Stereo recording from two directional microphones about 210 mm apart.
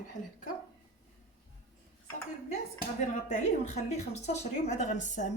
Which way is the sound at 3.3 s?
35° left (ahead or behind).